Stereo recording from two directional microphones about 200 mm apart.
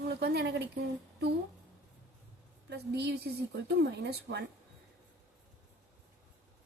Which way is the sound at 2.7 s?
55° right (ahead or behind).